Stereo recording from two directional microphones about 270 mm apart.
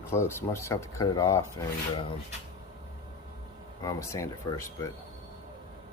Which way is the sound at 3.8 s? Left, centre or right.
Centre.